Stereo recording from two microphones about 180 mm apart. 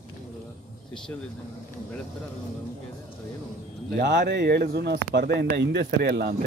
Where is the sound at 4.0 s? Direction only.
65° right (ahead or behind).